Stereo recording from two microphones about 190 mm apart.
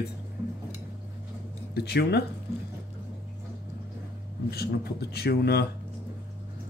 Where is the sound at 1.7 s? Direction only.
60° left (ahead or behind).